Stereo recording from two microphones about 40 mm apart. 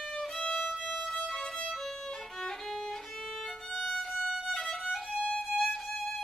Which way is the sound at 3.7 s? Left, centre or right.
Centre.